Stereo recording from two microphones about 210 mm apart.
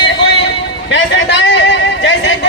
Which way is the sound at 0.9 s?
60° left (ahead or behind).